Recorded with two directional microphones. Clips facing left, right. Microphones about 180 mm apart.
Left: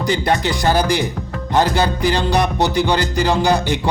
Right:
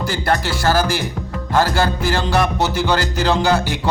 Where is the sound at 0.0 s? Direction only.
20° left (ahead or behind).